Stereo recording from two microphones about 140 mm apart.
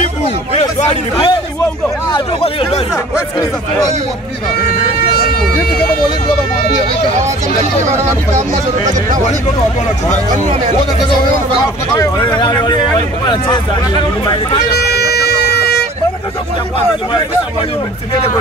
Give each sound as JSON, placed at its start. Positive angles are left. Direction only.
{"t": 0.6, "sound": "speech", "side_deg": 50}
{"t": 2.1, "sound": "speech", "side_deg": 40}
{"t": 2.9, "sound": "speech", "side_deg": 25}
{"t": 8.4, "sound": "speech", "side_deg": -65}
{"t": 12.4, "sound": "speech", "side_deg": 30}